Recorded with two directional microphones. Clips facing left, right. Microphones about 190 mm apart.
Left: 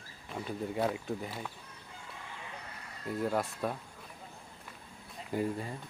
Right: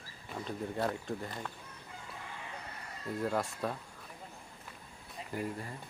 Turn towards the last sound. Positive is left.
turn(degrees=20)  # may be behind; listen again after turning